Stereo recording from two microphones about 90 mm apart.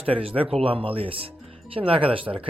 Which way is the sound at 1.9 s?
80° right.